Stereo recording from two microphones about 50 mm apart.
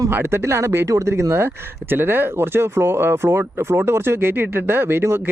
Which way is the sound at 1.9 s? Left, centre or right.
Right.